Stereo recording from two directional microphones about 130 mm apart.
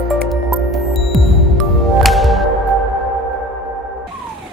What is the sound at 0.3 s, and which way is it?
Music, centre (ahead or behind).